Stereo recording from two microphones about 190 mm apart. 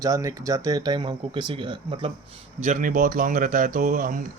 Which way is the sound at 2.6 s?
40° right (ahead or behind).